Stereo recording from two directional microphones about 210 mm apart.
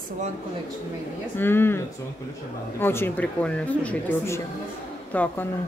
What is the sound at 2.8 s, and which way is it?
Speech, 10° left (ahead or behind).